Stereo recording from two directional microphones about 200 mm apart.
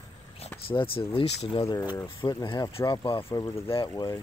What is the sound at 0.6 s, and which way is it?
Speech, 25° left (ahead or behind).